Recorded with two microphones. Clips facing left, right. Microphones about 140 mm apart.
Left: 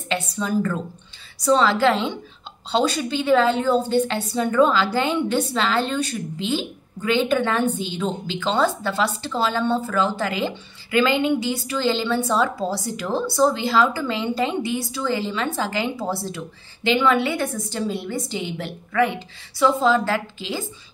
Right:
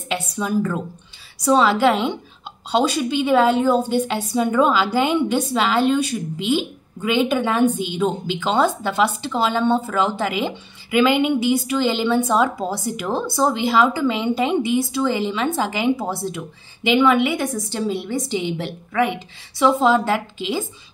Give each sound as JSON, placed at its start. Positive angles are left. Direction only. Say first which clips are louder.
{"t": 0.1, "sound": "a woman's voice", "louder": "right 1 dB", "side_deg": -10}